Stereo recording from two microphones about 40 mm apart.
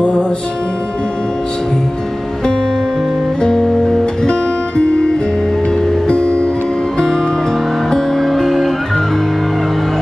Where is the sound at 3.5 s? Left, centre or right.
Centre.